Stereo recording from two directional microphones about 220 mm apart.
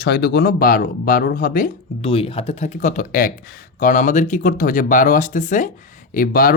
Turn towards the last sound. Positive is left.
turn(degrees=40)  # may be behind; listen again after turning